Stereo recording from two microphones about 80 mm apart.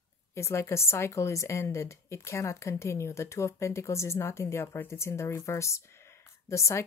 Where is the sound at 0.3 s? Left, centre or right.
Left.